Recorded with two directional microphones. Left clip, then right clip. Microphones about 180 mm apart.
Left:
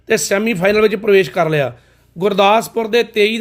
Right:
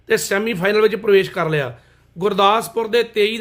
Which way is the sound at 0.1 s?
25° left (ahead or behind).